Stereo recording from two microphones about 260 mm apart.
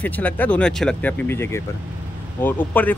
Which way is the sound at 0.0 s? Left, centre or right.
Centre.